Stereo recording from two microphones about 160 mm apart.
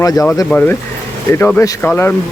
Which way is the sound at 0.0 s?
20° left (ahead or behind).